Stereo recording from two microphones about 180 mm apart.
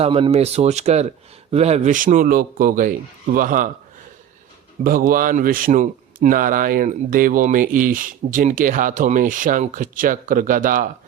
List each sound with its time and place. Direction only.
0.0 s a man's voice: 35° right (ahead or behind)
4.8 s a man's voice: 50° right (ahead or behind)